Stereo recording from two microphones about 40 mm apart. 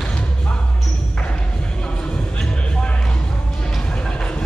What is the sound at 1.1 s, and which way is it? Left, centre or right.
Music, left.